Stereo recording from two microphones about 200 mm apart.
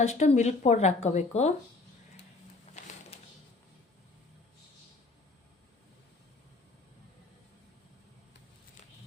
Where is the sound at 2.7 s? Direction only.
35° left (ahead or behind).